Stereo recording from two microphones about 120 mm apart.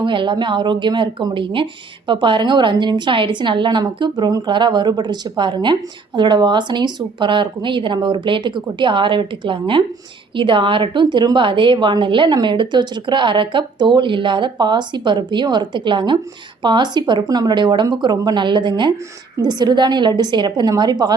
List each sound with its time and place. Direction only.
0.0 s a woman's voice: 45° right (ahead or behind)